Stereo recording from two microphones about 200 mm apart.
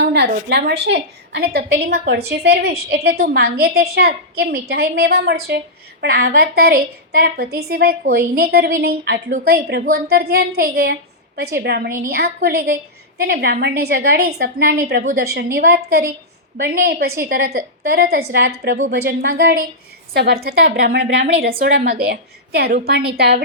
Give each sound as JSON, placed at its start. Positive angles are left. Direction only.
{"t": 0.0, "sound": "a woman's voice", "side_deg": -55}